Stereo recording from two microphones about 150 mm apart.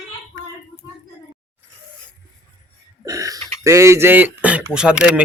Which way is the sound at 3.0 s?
20° right (ahead or behind).